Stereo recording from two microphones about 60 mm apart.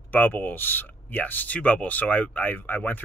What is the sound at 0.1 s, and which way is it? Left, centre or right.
Speech, left.